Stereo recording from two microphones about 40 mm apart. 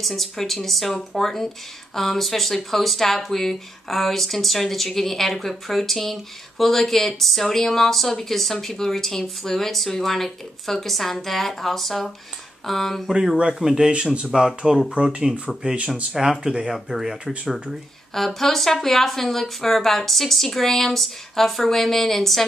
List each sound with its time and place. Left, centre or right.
0.0 s speech: centre
13.1 s speech: centre
13.9 s speech: right
14.3 s speech: centre
16.2 s speech: centre
18.1 s speech: centre